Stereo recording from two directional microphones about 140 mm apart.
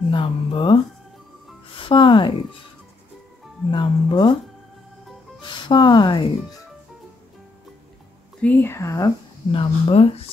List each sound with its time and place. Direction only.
0.1 s speech: 35° left (ahead or behind)
1.8 s speech: 35° left (ahead or behind)
3.7 s speech: 30° left (ahead or behind)
5.4 s speech: 35° left (ahead or behind)
8.4 s speech: 15° left (ahead or behind)
9.5 s speech: 40° left (ahead or behind)